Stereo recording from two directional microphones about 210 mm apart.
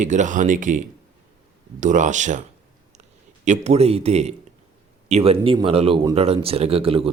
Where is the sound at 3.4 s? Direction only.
30° right (ahead or behind).